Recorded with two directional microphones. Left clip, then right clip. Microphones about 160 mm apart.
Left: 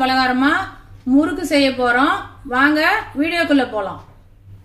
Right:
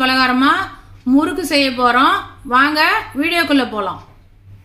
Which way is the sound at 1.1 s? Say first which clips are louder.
Right 1 dB; 55° right (ahead or behind).